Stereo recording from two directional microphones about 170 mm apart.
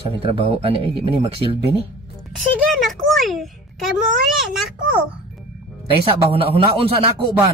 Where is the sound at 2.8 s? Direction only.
Centre (ahead or behind).